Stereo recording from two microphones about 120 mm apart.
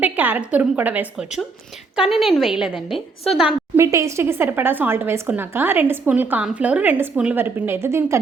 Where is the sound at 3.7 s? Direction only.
25° right (ahead or behind).